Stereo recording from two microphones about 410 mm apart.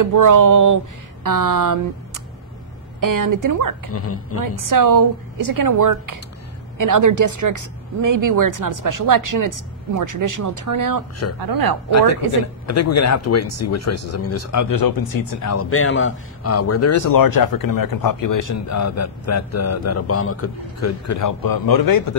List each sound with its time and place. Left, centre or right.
0.0 s speech: right
3.9 s speech: left
4.4 s speech: right
12.3 s speech: left
15.4 s speech: left